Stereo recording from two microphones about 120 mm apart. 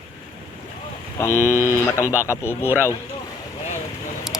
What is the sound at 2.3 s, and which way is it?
Speech, 20° left (ahead or behind).